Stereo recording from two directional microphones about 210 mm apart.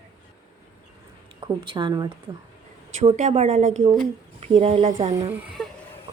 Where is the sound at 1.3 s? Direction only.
20° right (ahead or behind).